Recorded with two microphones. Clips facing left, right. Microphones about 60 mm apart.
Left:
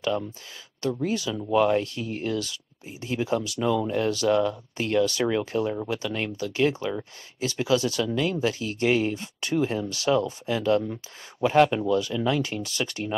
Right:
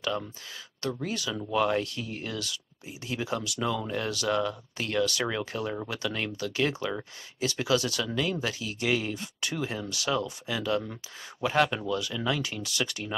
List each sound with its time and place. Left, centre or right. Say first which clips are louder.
0.8 s speech: left 5 dB; left